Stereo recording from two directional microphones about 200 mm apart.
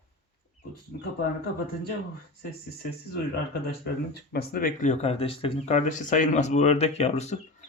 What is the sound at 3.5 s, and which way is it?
Speech, 55° left (ahead or behind).